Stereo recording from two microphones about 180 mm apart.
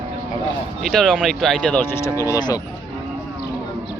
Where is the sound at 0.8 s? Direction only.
Centre (ahead or behind); by 2.6 s 20° left (ahead or behind).